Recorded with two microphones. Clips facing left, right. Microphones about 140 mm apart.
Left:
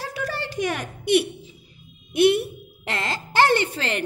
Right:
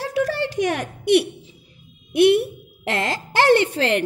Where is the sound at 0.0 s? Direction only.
90° right; by 1.5 s 65° right (ahead or behind).